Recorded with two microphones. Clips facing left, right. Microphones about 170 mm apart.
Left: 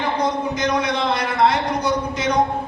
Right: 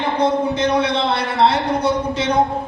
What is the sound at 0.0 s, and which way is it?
A man's voice, 30° right (ahead or behind).